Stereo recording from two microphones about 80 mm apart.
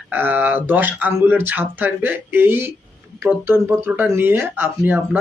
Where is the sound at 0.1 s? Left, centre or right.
Right.